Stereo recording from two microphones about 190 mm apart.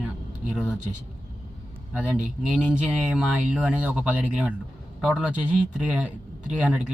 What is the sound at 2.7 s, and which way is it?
Speech, 5° right (ahead or behind).